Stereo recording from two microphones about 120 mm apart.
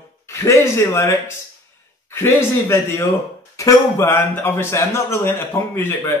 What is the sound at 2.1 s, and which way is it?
Speech, 20° left (ahead or behind).